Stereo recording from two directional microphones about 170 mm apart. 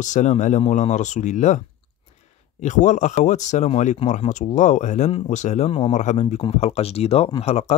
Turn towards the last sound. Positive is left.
turn(degrees=40)  # may be behind; listen again after turning